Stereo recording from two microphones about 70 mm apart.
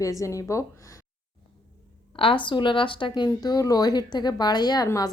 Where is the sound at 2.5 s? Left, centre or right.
Left.